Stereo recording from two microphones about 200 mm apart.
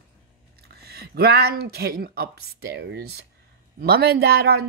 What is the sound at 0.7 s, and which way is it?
A woman's voice, 50° right (ahead or behind).